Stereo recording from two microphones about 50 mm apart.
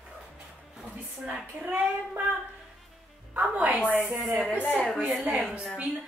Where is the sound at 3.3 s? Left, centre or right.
Right.